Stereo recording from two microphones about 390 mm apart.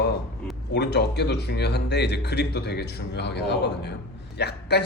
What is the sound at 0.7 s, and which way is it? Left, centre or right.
A man's voice, left.